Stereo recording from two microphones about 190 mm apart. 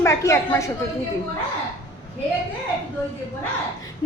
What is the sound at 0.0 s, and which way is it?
Speech, 15° left (ahead or behind).